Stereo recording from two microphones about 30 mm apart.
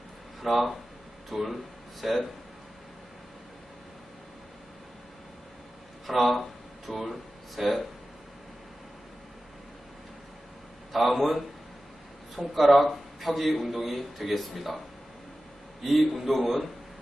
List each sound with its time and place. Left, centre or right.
0.4 s a man's voice: centre
6.1 s speech: centre
10.9 s a man's voice: centre
15.8 s a man's voice: centre